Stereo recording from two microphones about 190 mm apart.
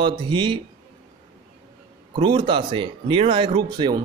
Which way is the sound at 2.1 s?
25° right (ahead or behind).